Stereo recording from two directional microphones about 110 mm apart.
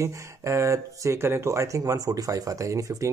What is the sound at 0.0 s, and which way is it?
Speech, 25° right (ahead or behind).